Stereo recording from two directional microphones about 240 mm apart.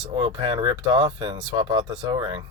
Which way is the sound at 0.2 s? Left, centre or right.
Right.